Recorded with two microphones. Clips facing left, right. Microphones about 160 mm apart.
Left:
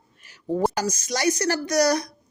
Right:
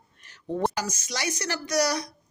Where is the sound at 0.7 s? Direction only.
45° left (ahead or behind).